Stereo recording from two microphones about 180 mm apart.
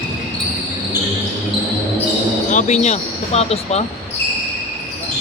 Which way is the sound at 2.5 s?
40° left (ahead or behind).